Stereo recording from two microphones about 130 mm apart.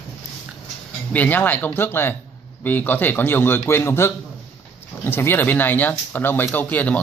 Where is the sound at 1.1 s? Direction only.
15° left (ahead or behind).